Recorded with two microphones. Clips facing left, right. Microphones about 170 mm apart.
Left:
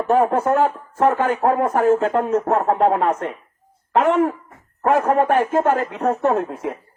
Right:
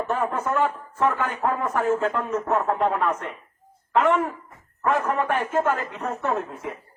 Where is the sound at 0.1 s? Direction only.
50° left (ahead or behind).